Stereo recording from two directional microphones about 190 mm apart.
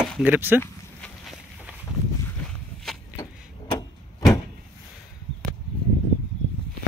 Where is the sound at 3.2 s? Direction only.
15° left (ahead or behind).